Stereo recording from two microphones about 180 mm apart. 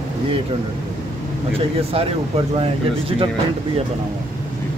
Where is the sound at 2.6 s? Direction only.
30° right (ahead or behind).